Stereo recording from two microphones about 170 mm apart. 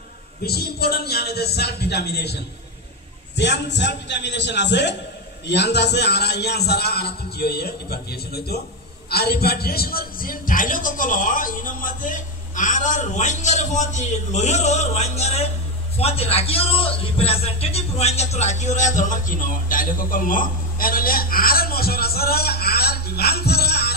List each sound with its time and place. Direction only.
0.4 s a man's voice: 65° left (ahead or behind)
3.3 s a man's voice: 90° left; by 24.0 s 70° left (ahead or behind)